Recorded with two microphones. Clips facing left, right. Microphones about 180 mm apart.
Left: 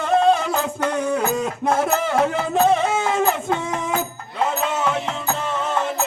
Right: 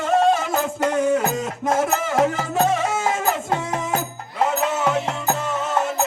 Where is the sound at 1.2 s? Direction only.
45° right (ahead or behind).